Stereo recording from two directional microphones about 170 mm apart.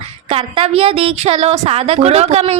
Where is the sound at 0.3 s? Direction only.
35° right (ahead or behind).